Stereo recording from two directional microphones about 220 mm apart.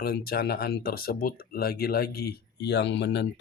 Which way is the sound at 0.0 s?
45° left (ahead or behind).